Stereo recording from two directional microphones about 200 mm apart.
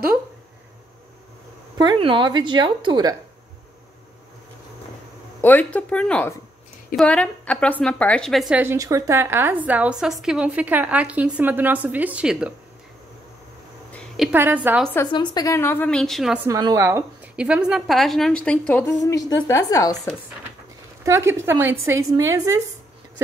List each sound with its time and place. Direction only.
1.8 s a woman's voice: 25° right (ahead or behind)
5.4 s a woman's voice: 10° left (ahead or behind)
13.9 s a woman's voice: centre (ahead or behind)
15.0 s a woman's voice: 20° left (ahead or behind); by 16.3 s centre (ahead or behind)
16.4 s a woman's voice: 15° right (ahead or behind); by 20.0 s 15° left (ahead or behind)
21.0 s a woman's voice: 15° right (ahead or behind)